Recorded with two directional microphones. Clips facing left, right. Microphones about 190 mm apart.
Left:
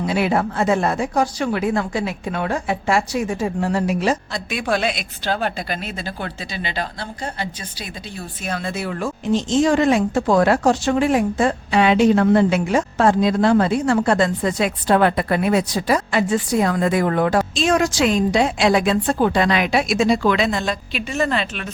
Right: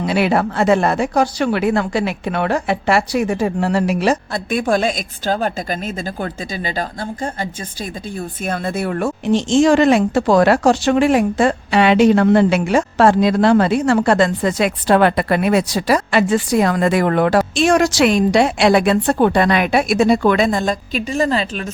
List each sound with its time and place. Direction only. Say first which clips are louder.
0.0 s speech: right 3 dB; 80° right; by 21.7 s 35° right (ahead or behind)